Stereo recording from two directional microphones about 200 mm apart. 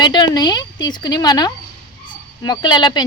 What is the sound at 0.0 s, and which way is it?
Speech, 20° left (ahead or behind).